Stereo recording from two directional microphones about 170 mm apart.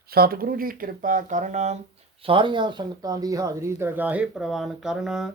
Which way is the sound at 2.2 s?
30° right (ahead or behind).